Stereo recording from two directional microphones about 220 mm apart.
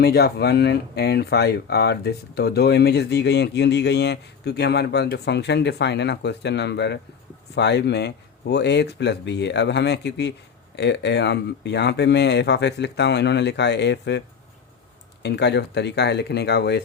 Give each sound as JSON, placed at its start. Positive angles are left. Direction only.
{"t": 0.0, "sound": "speech", "side_deg": 45}
{"t": 15.2, "sound": "speech", "side_deg": 50}